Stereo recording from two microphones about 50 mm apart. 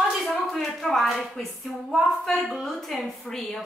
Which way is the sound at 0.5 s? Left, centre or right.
Centre.